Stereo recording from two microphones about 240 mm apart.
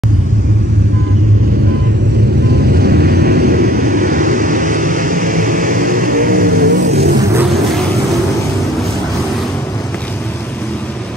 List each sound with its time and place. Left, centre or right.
2.6 s vehicle: right